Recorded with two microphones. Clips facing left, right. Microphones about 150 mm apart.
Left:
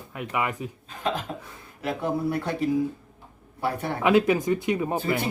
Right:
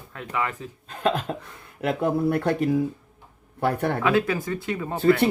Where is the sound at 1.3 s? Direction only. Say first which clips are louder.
Right 4 dB; 60° right (ahead or behind).